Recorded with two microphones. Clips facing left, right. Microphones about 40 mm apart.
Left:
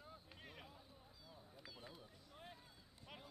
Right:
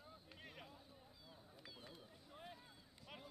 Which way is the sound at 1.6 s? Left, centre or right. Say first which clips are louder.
Left 1 dB; centre.